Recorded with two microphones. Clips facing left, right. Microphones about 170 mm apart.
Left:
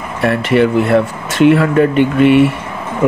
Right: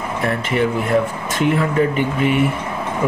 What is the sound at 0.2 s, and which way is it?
Speech, 75° left (ahead or behind).